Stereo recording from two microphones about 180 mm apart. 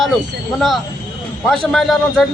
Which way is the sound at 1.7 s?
Centre (ahead or behind).